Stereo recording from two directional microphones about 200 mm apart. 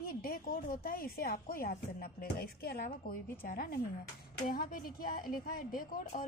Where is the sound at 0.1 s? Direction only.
45° left (ahead or behind).